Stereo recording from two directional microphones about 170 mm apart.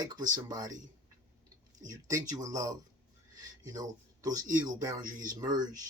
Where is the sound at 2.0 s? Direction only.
20° right (ahead or behind).